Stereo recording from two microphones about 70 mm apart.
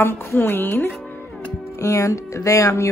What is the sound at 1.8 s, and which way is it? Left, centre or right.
Speech, left.